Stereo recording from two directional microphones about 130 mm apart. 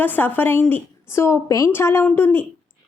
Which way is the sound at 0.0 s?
15° left (ahead or behind).